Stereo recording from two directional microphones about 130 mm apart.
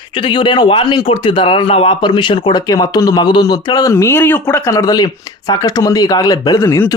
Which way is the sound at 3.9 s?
20° left (ahead or behind).